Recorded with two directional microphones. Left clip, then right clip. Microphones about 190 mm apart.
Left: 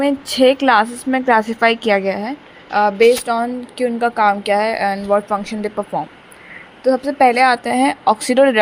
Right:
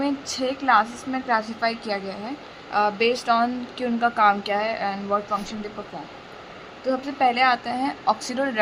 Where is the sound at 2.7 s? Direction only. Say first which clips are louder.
Left 9 dB; 20° left (ahead or behind).